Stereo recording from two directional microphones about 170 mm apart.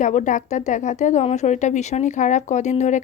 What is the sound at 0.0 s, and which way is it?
A woman's voice, 45° left (ahead or behind).